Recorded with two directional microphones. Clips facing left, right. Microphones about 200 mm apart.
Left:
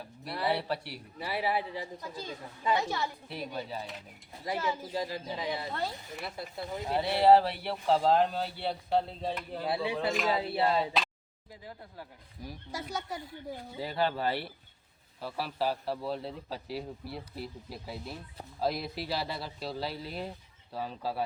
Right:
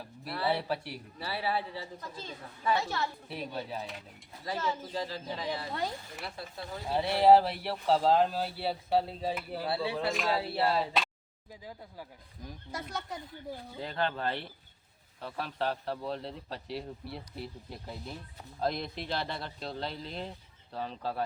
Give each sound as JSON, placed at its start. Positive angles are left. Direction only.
{"t": 0.5, "sound": "speech", "side_deg": 0}
{"t": 1.2, "sound": "a woman's voice", "side_deg": 15}
{"t": 3.2, "sound": "speech", "side_deg": 0}
{"t": 4.4, "sound": "a woman's voice", "side_deg": 10}
{"t": 5.7, "sound": "speech", "side_deg": -10}
{"t": 6.2, "sound": "a woman's voice", "side_deg": 15}
{"t": 6.8, "sound": "speech", "side_deg": 0}
{"t": 9.6, "sound": "a woman's voice", "side_deg": 15}
{"t": 10.0, "sound": "speech", "side_deg": 0}
{"t": 12.4, "sound": "a woman's voice", "side_deg": 5}